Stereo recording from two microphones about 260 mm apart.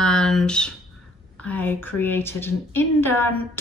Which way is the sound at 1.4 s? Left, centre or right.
Centre.